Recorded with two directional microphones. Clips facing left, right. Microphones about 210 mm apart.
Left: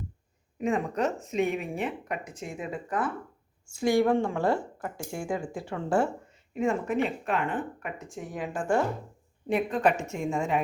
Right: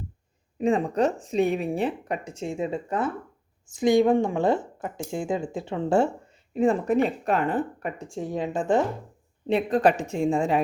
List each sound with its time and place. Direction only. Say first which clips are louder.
0.6 s speech: right 5 dB; 30° right (ahead or behind)
9.5 s speech: right 4 dB; 30° right (ahead or behind)